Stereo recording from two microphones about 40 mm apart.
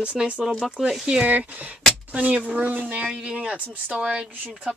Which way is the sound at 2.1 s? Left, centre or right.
Right.